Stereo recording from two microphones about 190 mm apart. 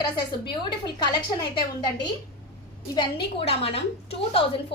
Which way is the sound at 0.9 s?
20° left (ahead or behind).